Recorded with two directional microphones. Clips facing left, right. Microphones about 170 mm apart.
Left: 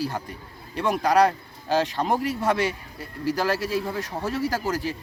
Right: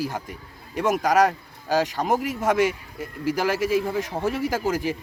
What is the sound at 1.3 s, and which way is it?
Speech, 10° right (ahead or behind).